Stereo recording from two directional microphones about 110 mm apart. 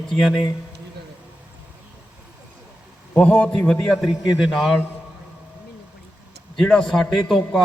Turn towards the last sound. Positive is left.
turn(degrees=5)  # may be behind; listen again after turning